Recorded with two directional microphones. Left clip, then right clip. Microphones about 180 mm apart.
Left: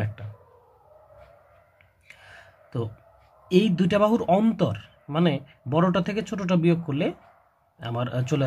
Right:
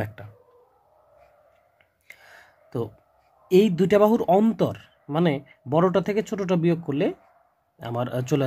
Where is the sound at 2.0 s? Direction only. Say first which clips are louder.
Even; 40° right (ahead or behind).